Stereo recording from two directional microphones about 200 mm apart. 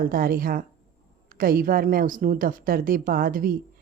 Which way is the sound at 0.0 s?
45° right (ahead or behind).